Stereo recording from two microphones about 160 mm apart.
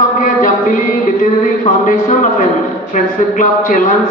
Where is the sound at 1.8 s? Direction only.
55° left (ahead or behind).